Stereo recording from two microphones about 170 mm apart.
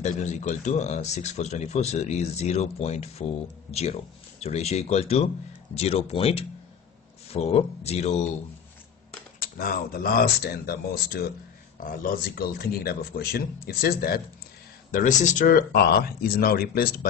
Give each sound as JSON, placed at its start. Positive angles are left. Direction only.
{"t": 0.0, "sound": "speech", "side_deg": 45}
{"t": 9.4, "sound": "a man's voice", "side_deg": 55}
{"t": 14.9, "sound": "a man's voice", "side_deg": 50}